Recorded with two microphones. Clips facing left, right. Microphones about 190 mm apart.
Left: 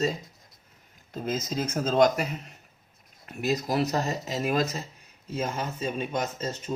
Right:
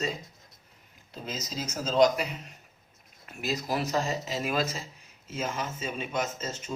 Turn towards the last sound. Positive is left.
turn(degrees=35)  # may be behind; listen again after turning